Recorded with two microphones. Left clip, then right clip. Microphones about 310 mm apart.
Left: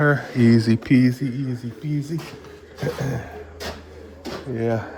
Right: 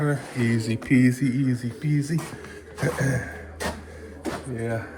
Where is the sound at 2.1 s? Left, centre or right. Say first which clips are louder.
Even; centre.